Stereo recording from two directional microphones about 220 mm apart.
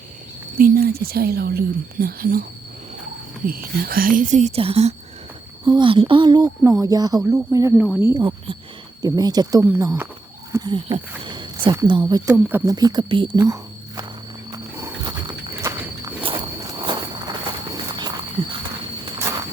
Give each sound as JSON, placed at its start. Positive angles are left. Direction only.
{"t": 0.5, "sound": "speech", "side_deg": -45}
{"t": 3.4, "sound": "speech", "side_deg": -40}
{"t": 8.2, "sound": "speech", "side_deg": -20}
{"t": 14.5, "sound": "wild animals", "side_deg": -15}
{"t": 15.6, "sound": "walk", "side_deg": -15}
{"t": 17.8, "sound": "wild animals", "side_deg": -20}
{"t": 18.4, "sound": "a sound", "side_deg": -25}